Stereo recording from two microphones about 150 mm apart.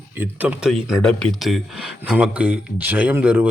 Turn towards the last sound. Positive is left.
turn(degrees=-10)  # may be behind; listen again after turning